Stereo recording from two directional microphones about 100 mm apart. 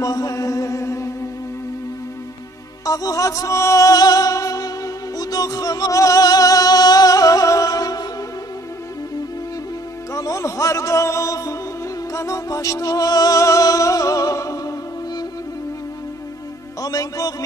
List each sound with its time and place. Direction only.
0.0 s mantra: 35° left (ahead or behind)
2.8 s music: 35° left (ahead or behind)
10.1 s music: 35° left (ahead or behind)
16.8 s music: 35° left (ahead or behind)